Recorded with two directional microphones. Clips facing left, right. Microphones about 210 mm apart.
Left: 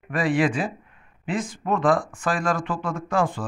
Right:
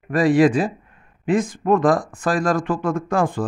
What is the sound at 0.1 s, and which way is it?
Speech, 40° right (ahead or behind).